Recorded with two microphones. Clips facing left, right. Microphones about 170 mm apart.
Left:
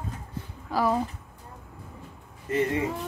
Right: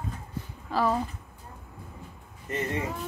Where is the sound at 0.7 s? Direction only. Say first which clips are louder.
Left 1 dB; 10° left (ahead or behind).